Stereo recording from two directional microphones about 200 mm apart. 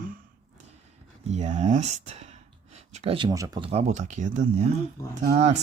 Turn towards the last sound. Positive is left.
turn(degrees=-35)  # may be behind; listen again after turning